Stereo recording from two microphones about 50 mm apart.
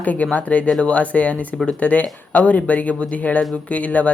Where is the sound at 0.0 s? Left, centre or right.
Left.